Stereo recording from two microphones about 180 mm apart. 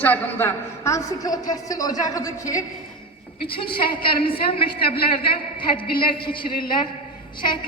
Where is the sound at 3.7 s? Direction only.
30° left (ahead or behind).